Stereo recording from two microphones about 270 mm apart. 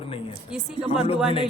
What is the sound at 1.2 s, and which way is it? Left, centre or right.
Speech, centre.